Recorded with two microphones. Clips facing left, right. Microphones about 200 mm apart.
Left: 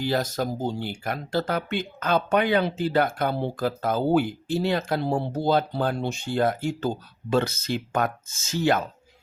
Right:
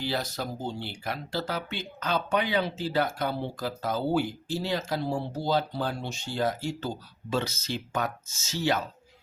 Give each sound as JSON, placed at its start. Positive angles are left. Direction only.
{"t": 0.0, "sound": "speech", "side_deg": 45}